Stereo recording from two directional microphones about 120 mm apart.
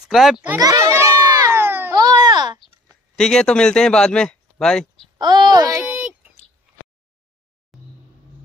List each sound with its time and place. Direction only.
0.0 s speech: centre (ahead or behind)
0.6 s children playing: 30° right (ahead or behind)
2.0 s baby cry: 35° right (ahead or behind)
3.2 s speech: 5° left (ahead or behind)
5.2 s a child's voice: 35° right (ahead or behind)
5.9 s a sound: 10° right (ahead or behind)
7.7 s vehicle: centre (ahead or behind)